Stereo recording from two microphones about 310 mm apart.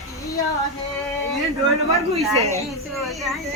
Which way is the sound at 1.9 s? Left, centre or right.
Centre.